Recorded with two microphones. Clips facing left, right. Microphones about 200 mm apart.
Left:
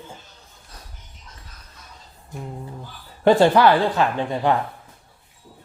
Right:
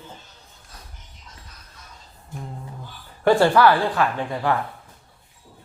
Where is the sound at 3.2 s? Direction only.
20° left (ahead or behind).